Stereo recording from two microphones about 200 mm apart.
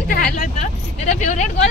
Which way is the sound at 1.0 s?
35° left (ahead or behind).